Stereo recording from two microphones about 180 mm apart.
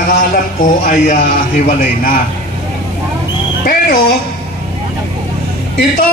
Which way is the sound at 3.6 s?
55° left (ahead or behind).